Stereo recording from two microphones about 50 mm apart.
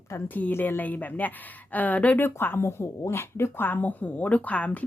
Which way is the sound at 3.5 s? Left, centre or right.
Left.